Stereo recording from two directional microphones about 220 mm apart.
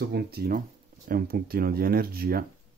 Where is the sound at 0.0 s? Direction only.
45° right (ahead or behind).